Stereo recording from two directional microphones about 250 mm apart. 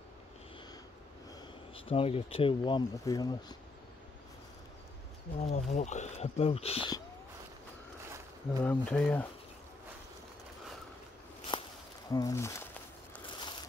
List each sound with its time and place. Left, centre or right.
1.9 s speech: left
5.4 s speech: left
8.5 s speech: centre
11.5 s walk: centre
12.1 s speech: centre